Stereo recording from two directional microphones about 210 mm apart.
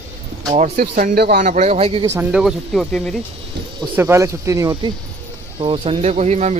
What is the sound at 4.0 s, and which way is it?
Speech, 10° right (ahead or behind).